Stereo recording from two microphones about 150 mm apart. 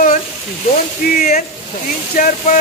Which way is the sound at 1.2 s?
65° left (ahead or behind).